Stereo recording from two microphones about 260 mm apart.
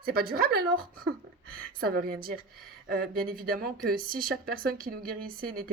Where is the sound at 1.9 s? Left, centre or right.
Right.